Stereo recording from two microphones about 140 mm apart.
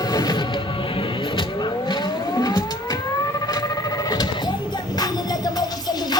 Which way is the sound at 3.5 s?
25° left (ahead or behind).